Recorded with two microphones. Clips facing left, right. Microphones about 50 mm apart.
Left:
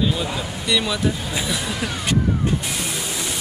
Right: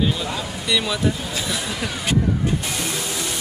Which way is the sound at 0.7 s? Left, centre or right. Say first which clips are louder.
Left 1 dB; centre.